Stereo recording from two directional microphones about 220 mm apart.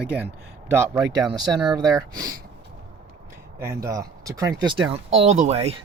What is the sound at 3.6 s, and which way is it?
Speech, 15° right (ahead or behind).